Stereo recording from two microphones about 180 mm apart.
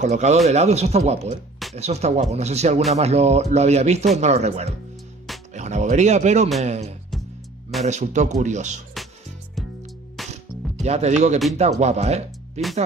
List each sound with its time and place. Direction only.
0.0 s speech: 40° right (ahead or behind)
9.6 s music: centre (ahead or behind)
10.3 s mechanisms: 35° right (ahead or behind)
11.5 s speech: 40° right (ahead or behind)